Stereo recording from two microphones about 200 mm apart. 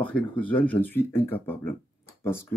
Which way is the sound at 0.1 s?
5° left (ahead or behind).